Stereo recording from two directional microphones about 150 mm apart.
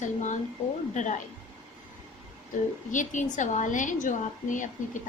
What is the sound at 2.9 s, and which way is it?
A woman's voice, 55° left (ahead or behind).